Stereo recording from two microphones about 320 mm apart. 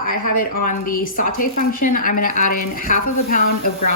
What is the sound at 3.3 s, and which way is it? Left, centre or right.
Speech, left.